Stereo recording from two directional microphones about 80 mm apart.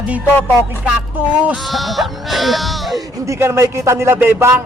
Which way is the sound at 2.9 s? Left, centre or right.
Right.